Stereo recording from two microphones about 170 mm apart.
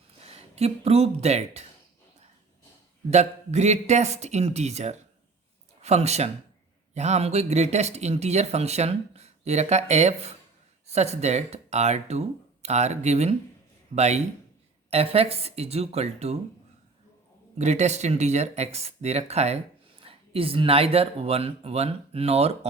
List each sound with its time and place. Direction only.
0.2 s speech: 35° right (ahead or behind)
3.1 s speech: 40° right (ahead or behind)
17.6 s speech: 40° right (ahead or behind)